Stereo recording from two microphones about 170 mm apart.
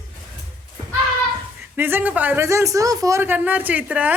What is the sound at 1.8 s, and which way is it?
Speech, 10° right (ahead or behind).